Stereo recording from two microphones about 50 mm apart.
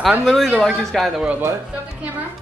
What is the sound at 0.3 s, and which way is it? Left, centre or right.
Speech, centre.